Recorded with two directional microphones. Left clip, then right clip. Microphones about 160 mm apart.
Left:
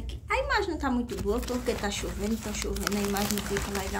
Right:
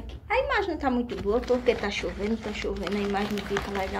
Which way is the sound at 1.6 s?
35° left (ahead or behind).